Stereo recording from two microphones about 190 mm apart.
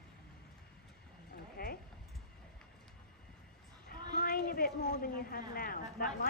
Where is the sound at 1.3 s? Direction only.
50° left (ahead or behind).